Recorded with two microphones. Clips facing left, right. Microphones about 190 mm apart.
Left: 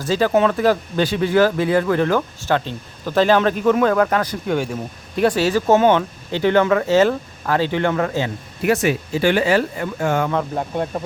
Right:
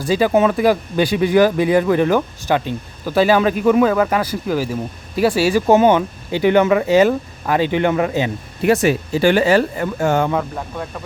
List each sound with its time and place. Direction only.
0.0 s speech: 15° right (ahead or behind)
8.6 s speech: 35° right (ahead or behind)
10.5 s speech: 30° left (ahead or behind)